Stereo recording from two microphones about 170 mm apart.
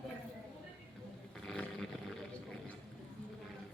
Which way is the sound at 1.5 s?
Centre (ahead or behind).